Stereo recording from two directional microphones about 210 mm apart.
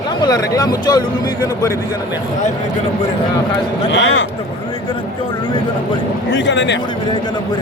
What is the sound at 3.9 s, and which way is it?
Speech, 60° left (ahead or behind).